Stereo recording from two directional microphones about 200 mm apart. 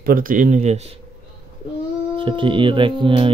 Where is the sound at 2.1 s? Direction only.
25° right (ahead or behind).